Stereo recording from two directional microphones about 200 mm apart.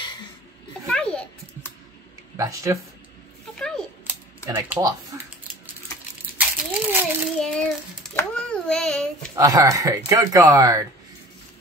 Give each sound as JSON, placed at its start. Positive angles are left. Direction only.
{"t": 0.8, "sound": "babbling", "side_deg": 5}
{"t": 2.3, "sound": "speech", "side_deg": -15}
{"t": 3.5, "sound": "a sound", "side_deg": 5}
{"t": 4.5, "sound": "typing", "side_deg": -10}
{"t": 6.3, "sound": "crunch", "side_deg": -10}
{"t": 7.2, "sound": "child singing", "side_deg": 5}
{"t": 9.3, "sound": "speech", "side_deg": -15}